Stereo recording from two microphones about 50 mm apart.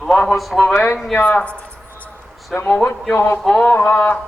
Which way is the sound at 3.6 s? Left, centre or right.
Left.